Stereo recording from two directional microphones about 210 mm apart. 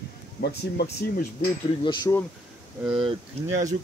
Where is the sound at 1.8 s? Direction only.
20° left (ahead or behind).